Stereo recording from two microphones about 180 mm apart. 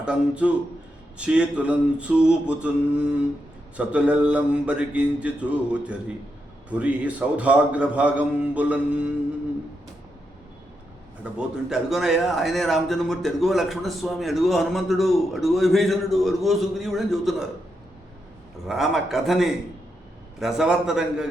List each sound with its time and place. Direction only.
0.0 s a man's voice: 5° right (ahead or behind)
3.8 s a man's voice: 5° right (ahead or behind)
11.2 s a man's voice: 5° right (ahead or behind)
18.7 s a man's voice: centre (ahead or behind)